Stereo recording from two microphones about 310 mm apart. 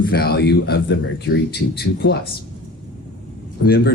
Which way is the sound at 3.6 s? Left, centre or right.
Left.